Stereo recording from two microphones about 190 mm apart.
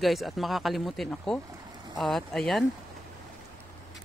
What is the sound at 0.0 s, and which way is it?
Speech, centre (ahead or behind).